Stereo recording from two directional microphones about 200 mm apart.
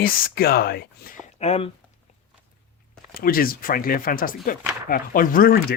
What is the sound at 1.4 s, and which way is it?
Speech, 30° left (ahead or behind).